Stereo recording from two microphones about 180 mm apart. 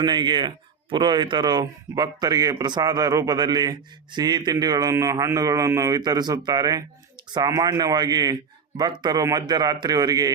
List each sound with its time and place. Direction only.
0.0 s speech: 25° right (ahead or behind)